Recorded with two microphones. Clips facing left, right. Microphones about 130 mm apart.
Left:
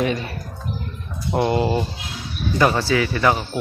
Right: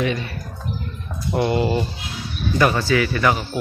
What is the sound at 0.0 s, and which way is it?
Speech, 40° left (ahead or behind).